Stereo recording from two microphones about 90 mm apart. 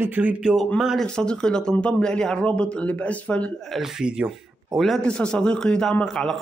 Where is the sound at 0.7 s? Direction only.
Centre (ahead or behind).